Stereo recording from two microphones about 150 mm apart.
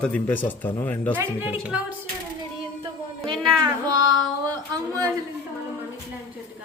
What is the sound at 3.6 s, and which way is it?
Child singing, 30° right (ahead or behind).